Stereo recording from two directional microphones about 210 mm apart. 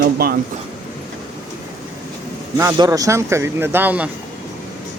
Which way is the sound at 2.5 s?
15° right (ahead or behind).